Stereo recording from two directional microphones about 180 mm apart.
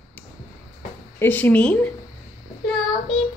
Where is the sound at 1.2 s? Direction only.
10° left (ahead or behind).